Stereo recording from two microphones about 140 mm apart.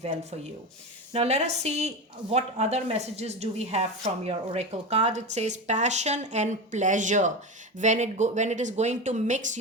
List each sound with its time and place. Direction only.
1.1 s a woman's voice: 50° right (ahead or behind)